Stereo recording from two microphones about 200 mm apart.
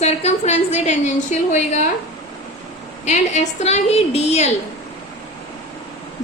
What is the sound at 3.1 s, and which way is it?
A woman's voice, 35° left (ahead or behind).